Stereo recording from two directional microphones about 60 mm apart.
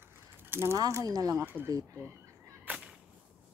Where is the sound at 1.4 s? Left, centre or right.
Right.